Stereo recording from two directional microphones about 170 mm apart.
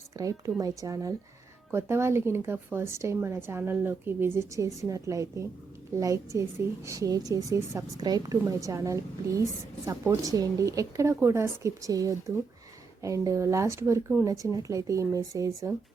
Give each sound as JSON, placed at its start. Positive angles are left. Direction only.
{"t": 0.2, "sound": "a woman's voice", "side_deg": -20}